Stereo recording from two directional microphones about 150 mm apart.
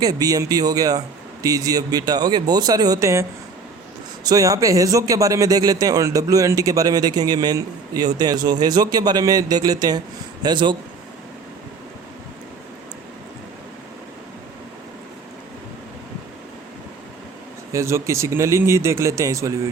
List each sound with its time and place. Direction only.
0.0 s a man's voice: 25° right (ahead or behind)
17.7 s a man's voice: 20° right (ahead or behind)